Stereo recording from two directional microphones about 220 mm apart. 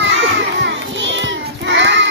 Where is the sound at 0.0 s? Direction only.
55° right (ahead or behind).